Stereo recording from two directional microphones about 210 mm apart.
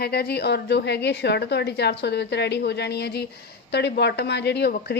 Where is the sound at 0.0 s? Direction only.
50° left (ahead or behind).